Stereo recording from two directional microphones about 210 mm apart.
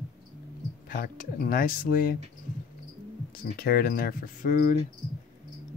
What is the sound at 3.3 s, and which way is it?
Speech, 45° left (ahead or behind).